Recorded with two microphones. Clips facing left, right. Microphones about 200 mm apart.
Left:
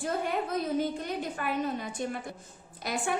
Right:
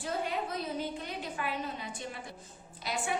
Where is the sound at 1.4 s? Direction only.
50° left (ahead or behind).